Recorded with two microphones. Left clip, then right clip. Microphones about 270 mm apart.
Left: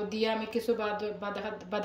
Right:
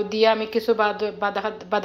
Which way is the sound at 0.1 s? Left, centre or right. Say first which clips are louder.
Right 13 dB; centre.